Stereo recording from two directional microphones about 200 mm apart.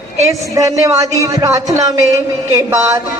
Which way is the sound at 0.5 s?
15° right (ahead or behind).